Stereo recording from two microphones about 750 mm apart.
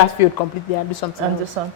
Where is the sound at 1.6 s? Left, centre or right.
Right.